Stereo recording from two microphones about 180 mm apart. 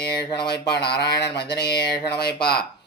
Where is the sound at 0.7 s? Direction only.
65° left (ahead or behind).